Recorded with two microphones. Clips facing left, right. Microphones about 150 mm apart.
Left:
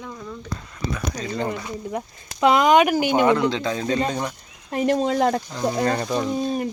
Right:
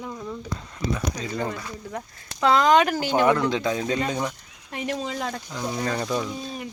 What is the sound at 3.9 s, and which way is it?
Speech, 35° left (ahead or behind).